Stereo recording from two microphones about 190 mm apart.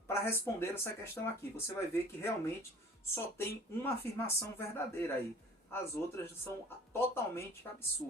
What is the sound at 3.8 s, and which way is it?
Speech, 10° left (ahead or behind).